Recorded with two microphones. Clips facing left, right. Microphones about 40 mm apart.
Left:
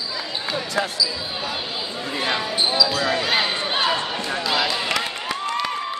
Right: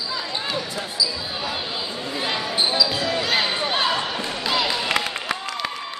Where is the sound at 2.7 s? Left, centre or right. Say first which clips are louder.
Left 4 dB; centre.